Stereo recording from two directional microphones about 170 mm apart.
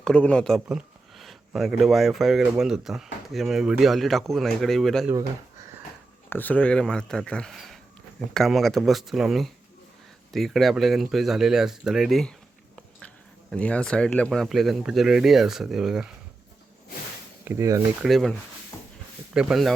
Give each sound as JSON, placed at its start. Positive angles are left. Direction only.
{"t": 0.0, "sound": "speech", "side_deg": 5}
{"t": 6.3, "sound": "speech", "side_deg": 10}
{"t": 13.5, "sound": "speech", "side_deg": 5}
{"t": 17.4, "sound": "speech", "side_deg": -15}
{"t": 18.0, "sound": "speech", "side_deg": 0}